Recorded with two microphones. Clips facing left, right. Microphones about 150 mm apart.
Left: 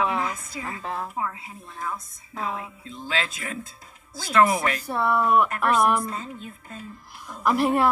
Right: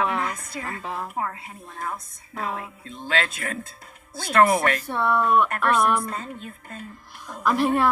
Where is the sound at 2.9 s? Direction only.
55° right (ahead or behind).